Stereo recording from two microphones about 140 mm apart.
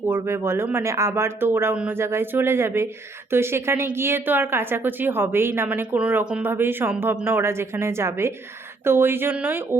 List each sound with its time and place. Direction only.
0.1 s a woman's voice: 20° right (ahead or behind)